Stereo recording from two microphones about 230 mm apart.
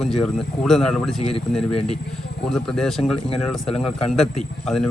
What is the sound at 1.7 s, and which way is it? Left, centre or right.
Speech, left.